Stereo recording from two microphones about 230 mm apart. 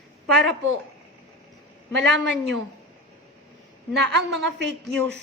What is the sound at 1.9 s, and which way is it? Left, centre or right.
Speech, right.